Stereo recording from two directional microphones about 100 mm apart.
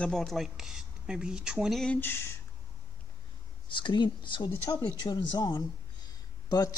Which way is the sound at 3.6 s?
50° left (ahead or behind).